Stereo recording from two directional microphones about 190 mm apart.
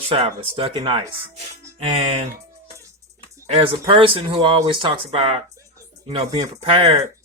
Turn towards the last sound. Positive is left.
turn(degrees=-30)  # may be behind; listen again after turning